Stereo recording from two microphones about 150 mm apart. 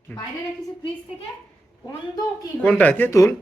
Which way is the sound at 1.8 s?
25° left (ahead or behind).